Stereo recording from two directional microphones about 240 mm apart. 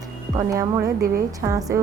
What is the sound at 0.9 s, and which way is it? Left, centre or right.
Speech, right.